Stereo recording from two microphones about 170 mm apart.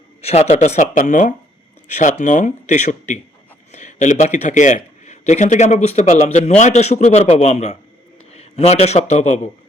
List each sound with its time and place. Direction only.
0.2 s a man's voice: 40° left (ahead or behind)